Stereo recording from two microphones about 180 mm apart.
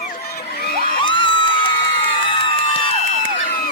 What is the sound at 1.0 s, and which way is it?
Music, 30° left (ahead or behind).